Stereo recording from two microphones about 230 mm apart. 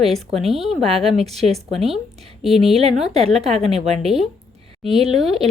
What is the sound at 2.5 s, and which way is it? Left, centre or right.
A woman's voice, right.